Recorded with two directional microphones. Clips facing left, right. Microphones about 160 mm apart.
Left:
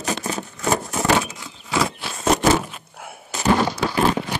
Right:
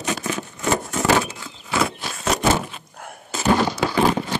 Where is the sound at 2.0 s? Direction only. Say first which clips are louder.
Even; 40° right (ahead or behind).